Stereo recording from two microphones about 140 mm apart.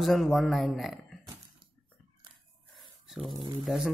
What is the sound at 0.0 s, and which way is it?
Speech, centre (ahead or behind).